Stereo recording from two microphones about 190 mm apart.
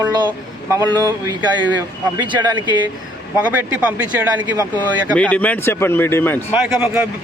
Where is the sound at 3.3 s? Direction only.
10° right (ahead or behind).